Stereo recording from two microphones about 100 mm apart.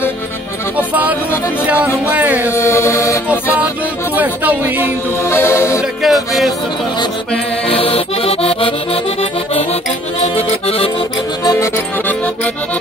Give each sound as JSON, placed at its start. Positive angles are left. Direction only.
{"t": 0.7, "sound": "music", "side_deg": -15}
{"t": 2.0, "sound": "speech", "side_deg": -15}
{"t": 2.5, "sound": "speech", "side_deg": 25}
{"t": 3.5, "sound": "music", "side_deg": -15}
{"t": 5.2, "sound": "music", "side_deg": 25}
{"t": 6.0, "sound": "speech", "side_deg": 0}
{"t": 7.6, "sound": "accordion", "side_deg": 70}